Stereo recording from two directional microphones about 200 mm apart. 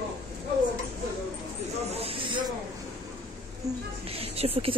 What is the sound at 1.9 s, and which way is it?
Snake, 25° right (ahead or behind).